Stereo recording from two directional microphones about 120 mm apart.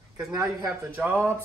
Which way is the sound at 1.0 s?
20° right (ahead or behind).